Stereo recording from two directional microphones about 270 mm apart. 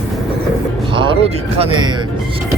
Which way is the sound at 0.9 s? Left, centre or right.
Centre.